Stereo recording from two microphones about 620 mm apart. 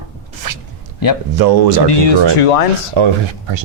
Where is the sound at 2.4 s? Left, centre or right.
Left.